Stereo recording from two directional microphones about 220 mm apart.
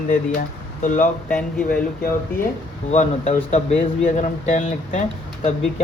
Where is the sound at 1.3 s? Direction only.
5° left (ahead or behind).